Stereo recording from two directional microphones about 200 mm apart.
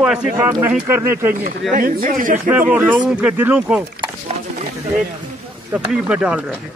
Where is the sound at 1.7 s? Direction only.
45° right (ahead or behind).